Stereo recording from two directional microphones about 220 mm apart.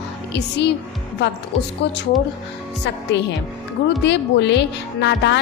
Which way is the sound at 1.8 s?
50° left (ahead or behind).